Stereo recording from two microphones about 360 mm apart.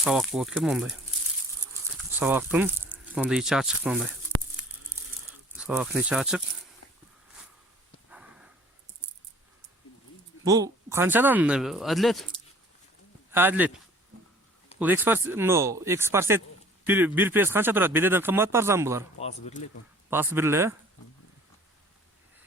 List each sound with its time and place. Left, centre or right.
0.0 s speech: centre
5.5 s speech: centre
8.1 s a sound: centre
10.4 s speech: centre
13.3 s speech: centre
14.8 s speech: centre
19.2 s speech: centre
20.1 s speech: centre